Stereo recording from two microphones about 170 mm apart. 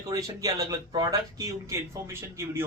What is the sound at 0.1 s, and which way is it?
A man's voice, 20° right (ahead or behind).